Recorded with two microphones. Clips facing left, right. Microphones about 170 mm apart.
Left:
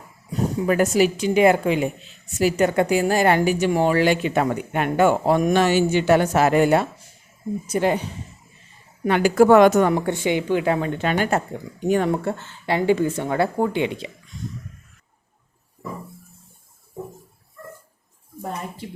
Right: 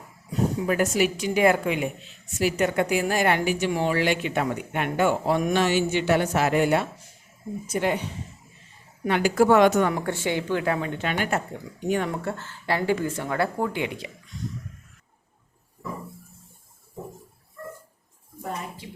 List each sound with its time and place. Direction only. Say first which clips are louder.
0.8 s a woman's voice: left 6 dB; 35° left (ahead or behind)
7.7 s a woman's voice: left 4 dB; 35° left (ahead or behind)
9.0 s a woman's voice: left 5 dB; 50° left (ahead or behind)
9.9 s speech: left 5 dB; 20° left (ahead or behind)
10.8 s a woman's voice: left 5 dB; 40° left (ahead or behind)